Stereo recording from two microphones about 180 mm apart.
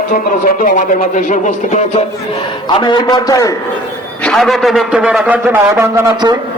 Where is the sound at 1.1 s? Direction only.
45° left (ahead or behind).